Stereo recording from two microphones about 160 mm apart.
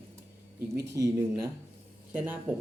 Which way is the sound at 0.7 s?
20° right (ahead or behind).